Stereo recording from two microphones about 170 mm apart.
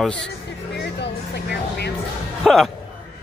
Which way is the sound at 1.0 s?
75° left (ahead or behind).